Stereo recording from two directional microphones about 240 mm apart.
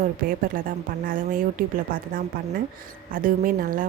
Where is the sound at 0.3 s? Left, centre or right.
Right.